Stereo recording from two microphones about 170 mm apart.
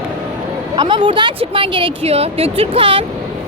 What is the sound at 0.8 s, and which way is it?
A woman's voice, 30° right (ahead or behind).